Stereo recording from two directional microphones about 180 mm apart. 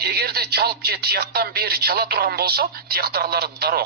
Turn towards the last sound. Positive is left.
turn(degrees=-60)  # may be behind; listen again after turning